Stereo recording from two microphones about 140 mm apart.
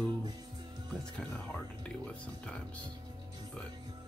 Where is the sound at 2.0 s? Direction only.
10° left (ahead or behind).